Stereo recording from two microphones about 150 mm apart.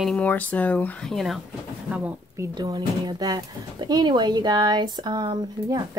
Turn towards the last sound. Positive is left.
turn(degrees=-30)  # may be behind; listen again after turning